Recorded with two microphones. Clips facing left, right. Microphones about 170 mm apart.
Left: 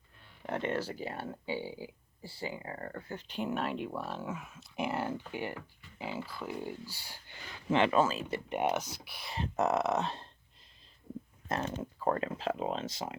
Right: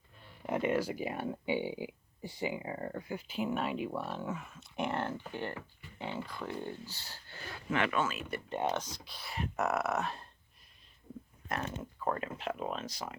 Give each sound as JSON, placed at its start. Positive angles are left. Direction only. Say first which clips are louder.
{"t": 0.4, "sound": "speech", "louder": "right 3 dB", "side_deg": -10}
{"t": 7.7, "sound": "speech", "louder": "left 5 dB", "side_deg": 30}
{"t": 8.4, "sound": "speech", "louder": "left 2 dB", "side_deg": 15}
{"t": 11.4, "sound": "speech", "louder": "left 3 dB", "side_deg": 30}